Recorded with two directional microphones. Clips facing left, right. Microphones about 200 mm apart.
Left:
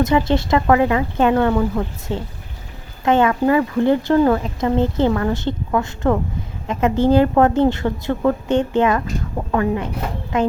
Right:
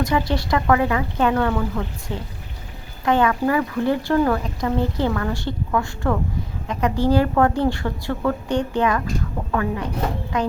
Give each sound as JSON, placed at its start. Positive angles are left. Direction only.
{"t": 0.0, "sound": "a woman's voice", "side_deg": 25}